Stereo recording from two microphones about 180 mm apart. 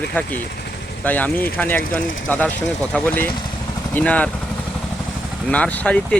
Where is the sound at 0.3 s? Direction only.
60° left (ahead or behind).